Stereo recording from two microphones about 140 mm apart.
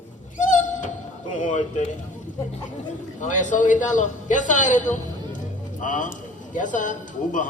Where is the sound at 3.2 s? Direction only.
65° left (ahead or behind).